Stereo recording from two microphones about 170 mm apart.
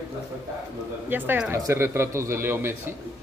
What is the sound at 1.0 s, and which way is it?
Speech, 10° right (ahead or behind).